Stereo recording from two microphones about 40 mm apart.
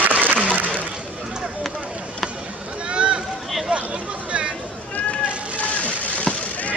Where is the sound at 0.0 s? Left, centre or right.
Right.